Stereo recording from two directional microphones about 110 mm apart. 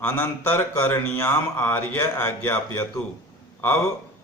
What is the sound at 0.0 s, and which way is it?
A man's voice, 20° left (ahead or behind).